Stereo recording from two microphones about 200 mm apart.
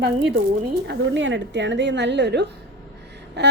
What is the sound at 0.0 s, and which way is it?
A woman's voice, 60° right (ahead or behind).